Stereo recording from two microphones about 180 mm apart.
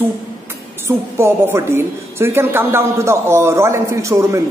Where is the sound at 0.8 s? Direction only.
15° right (ahead or behind).